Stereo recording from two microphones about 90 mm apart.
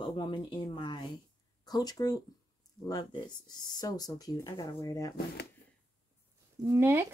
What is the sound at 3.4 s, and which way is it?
Speech, 45° left (ahead or behind).